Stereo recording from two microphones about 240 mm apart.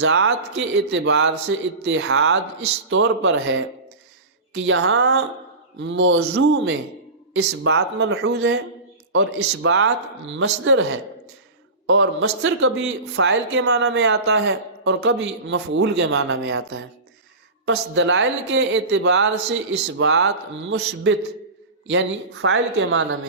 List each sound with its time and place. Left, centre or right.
0.0 s a man's voice: right
2.0 s speech: right
2.9 s a man's voice: right
7.3 s a man's voice: right
13.2 s a man's voice: right